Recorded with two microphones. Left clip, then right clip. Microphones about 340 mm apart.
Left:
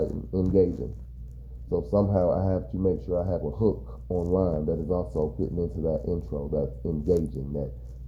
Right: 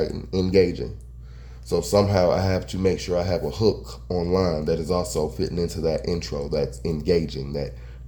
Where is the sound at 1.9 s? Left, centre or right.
Right.